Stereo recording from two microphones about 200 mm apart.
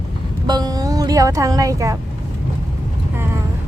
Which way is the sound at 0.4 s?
20° right (ahead or behind).